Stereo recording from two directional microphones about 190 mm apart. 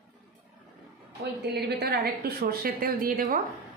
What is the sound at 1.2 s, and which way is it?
A woman's voice, 60° right (ahead or behind).